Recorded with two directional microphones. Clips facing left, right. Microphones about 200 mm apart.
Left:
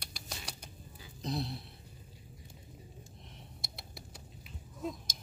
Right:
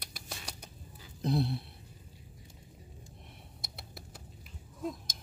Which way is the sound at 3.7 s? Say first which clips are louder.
Right 1 dB; centre (ahead or behind).